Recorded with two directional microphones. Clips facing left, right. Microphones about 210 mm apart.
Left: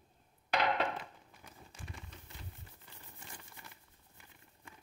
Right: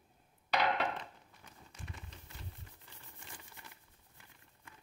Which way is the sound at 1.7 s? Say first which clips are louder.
Right 1 dB; 30° left (ahead or behind).